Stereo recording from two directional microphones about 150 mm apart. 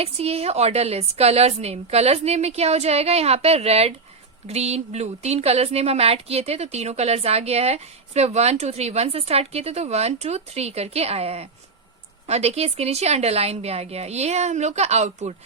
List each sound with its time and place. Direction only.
0.0 s a woman's voice: 40° right (ahead or behind)